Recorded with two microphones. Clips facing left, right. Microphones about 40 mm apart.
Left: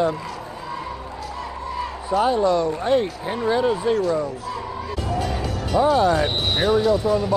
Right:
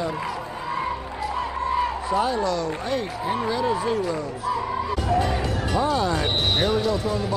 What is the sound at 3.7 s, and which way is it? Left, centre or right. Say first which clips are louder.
Speech: left 3 dB; centre.